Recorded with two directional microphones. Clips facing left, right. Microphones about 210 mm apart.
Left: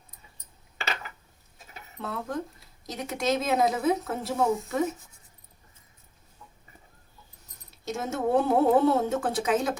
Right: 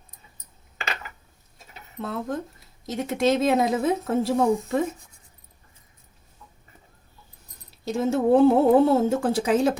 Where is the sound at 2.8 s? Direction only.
25° right (ahead or behind).